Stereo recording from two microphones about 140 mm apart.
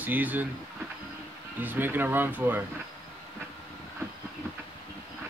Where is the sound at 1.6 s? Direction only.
15° right (ahead or behind).